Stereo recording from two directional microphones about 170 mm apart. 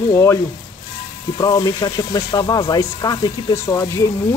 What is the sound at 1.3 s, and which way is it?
Speech, 20° left (ahead or behind).